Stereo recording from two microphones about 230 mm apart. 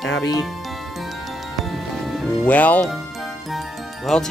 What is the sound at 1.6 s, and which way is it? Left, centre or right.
Music, centre.